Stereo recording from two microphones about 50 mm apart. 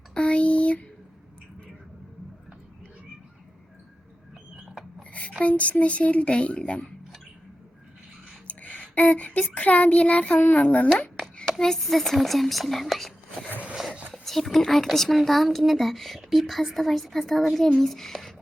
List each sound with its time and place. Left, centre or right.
0.1 s speech: left
4.5 s a sound: centre
5.4 s speech: left
8.4 s a sound: left
9.6 s speech: left
11.6 s speech: centre